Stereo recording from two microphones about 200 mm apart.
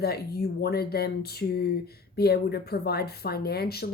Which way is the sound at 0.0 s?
50° left (ahead or behind).